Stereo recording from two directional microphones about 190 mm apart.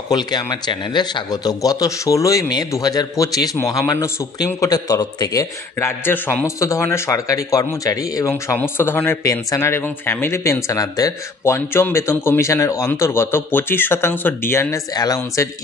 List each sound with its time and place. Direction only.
0.1 s a man's voice: 20° left (ahead or behind)